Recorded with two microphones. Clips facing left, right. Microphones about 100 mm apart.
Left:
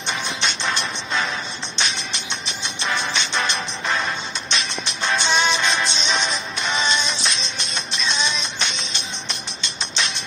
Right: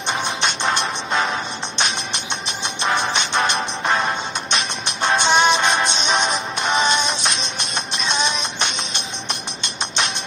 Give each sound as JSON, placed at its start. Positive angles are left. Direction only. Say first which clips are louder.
{"t": 0.1, "sound": "music", "louder": "right 3 dB", "side_deg": -55}